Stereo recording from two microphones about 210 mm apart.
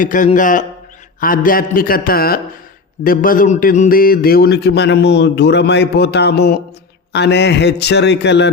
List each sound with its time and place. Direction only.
0.0 s a man's voice: 40° left (ahead or behind)